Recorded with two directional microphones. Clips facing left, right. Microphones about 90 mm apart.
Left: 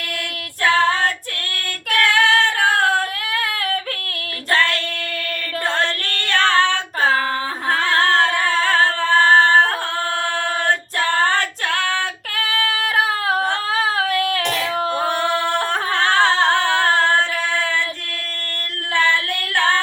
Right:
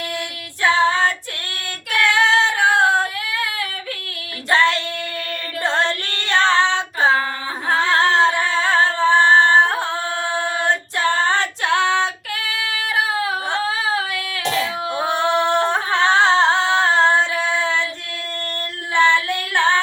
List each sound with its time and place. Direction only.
1.9 s female singing: 25° right (ahead or behind)
3.3 s yodeling: 50° left (ahead or behind)
4.5 s female singing: 25° right (ahead or behind)
5.6 s music: 25° right (ahead or behind)
7.7 s singing: 25° right (ahead or behind)
11.3 s female singing: 20° right (ahead or behind)
12.4 s female singing: 45° left (ahead or behind)
14.9 s singing: 20° right (ahead or behind)
15.6 s music: 20° right (ahead or behind)
18.9 s female singing: 20° right (ahead or behind)